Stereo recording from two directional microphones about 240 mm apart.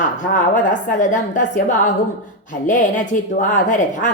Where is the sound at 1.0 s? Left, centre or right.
Left.